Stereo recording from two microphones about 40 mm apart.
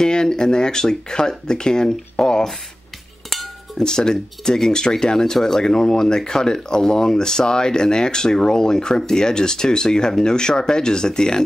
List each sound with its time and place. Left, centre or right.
0.0 s speech: centre
3.7 s speech: centre